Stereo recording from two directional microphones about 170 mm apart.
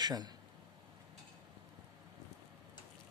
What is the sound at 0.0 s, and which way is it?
Speech, 25° right (ahead or behind).